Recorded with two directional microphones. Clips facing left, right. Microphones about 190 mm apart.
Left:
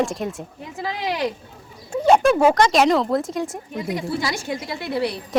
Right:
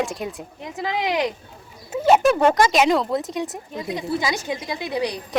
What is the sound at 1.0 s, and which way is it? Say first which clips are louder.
Speech: even; 20° right (ahead or behind).